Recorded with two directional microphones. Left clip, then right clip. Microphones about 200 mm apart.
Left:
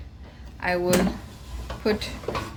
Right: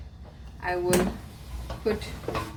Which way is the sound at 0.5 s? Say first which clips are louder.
Left 4 dB; 50° left (ahead or behind).